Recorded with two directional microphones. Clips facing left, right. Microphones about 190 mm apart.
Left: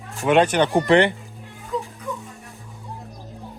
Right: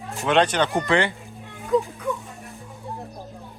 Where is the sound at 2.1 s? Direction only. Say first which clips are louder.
Right 4 dB; 55° right (ahead or behind).